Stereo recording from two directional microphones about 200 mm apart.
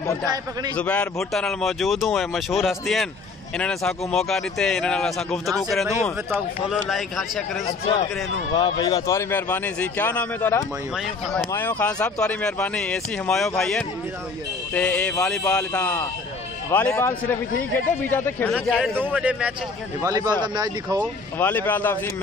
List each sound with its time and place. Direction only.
0.7 s speech: 5° left (ahead or behind)
8.5 s a man's voice: 25° left (ahead or behind); by 19.5 s 5° right (ahead or behind)
20.0 s a man's voice: 15° right (ahead or behind)
21.4 s a man's voice: 10° left (ahead or behind)